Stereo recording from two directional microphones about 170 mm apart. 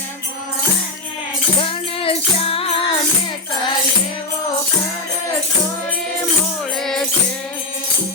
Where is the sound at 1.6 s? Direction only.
30° left (ahead or behind).